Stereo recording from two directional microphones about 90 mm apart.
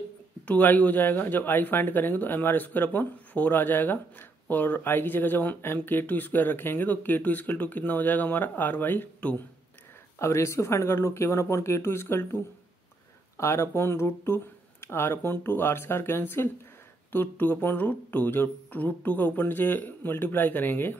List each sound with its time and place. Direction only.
0.5 s speech: 20° left (ahead or behind)
10.1 s speech: 30° left (ahead or behind)